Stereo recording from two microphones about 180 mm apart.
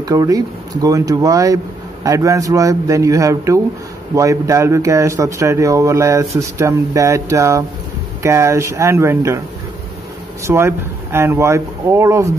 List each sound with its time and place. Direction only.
0.0 s speech: 20° right (ahead or behind)
10.4 s speech: 15° right (ahead or behind)